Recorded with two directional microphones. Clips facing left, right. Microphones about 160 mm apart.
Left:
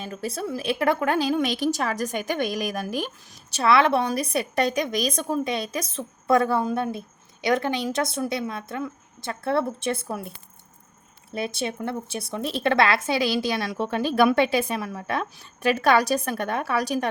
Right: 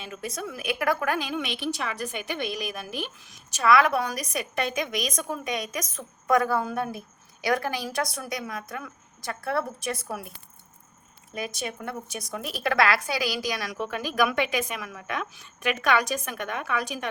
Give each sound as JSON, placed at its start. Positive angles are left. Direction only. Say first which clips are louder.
{"t": 0.0, "sound": "a woman's voice", "louder": "left 4 dB", "side_deg": 35}
{"t": 3.5, "sound": "a woman's voice", "louder": "left 2 dB", "side_deg": 30}